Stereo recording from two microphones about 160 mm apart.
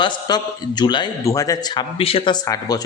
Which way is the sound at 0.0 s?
25° left (ahead or behind).